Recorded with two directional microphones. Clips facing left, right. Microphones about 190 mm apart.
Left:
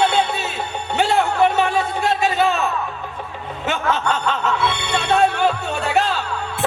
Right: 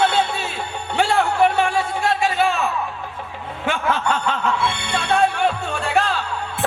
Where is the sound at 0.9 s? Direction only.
20° left (ahead or behind).